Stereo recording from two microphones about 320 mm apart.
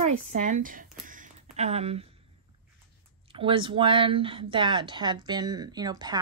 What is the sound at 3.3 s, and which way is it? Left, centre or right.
Speech, centre.